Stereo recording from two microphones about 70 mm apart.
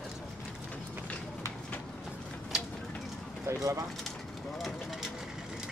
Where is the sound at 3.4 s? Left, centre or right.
Right.